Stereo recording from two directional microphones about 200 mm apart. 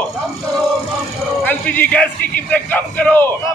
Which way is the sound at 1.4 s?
10° left (ahead or behind).